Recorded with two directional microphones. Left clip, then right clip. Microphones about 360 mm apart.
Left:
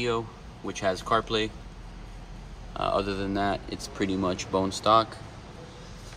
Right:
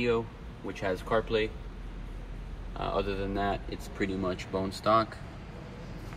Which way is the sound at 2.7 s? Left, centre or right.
Left.